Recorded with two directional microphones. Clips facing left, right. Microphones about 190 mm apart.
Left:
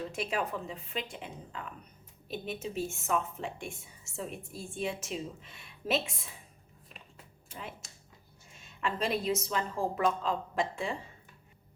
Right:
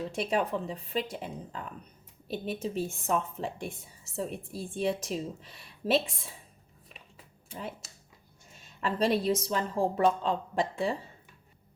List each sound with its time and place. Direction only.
0.2 s a woman's voice: 35° right (ahead or behind)
8.5 s a woman's voice: 35° right (ahead or behind)